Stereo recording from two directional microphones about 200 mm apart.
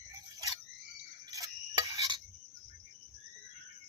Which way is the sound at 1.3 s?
15° right (ahead or behind).